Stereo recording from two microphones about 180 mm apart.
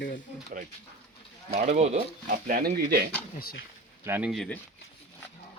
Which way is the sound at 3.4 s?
55° left (ahead or behind).